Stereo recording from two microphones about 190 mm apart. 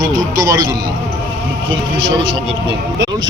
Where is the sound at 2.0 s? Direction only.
25° right (ahead or behind).